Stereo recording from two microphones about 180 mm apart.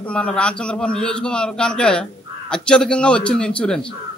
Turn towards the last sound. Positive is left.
turn(degrees=5)  # may be behind; listen again after turning